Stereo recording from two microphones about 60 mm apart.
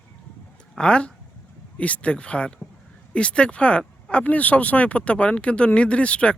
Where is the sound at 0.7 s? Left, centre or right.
Centre.